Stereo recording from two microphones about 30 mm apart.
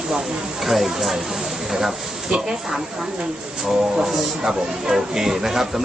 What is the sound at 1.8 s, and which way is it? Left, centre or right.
Speech, centre.